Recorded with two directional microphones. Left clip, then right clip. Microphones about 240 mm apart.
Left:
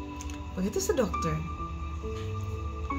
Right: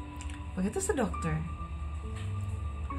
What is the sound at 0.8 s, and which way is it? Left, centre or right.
Speech, centre.